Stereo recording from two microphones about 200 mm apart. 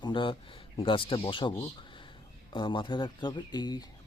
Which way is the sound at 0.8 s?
25° left (ahead or behind).